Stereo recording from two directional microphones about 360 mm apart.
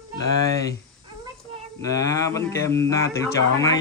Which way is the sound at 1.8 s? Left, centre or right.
Centre.